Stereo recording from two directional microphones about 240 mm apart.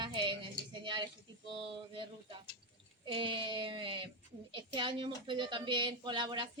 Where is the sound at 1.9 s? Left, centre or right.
Right.